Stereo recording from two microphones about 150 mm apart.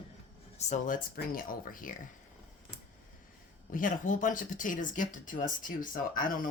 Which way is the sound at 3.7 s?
60° left (ahead or behind).